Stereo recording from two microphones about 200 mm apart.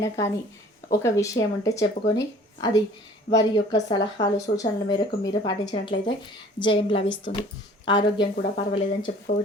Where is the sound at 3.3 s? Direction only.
20° left (ahead or behind).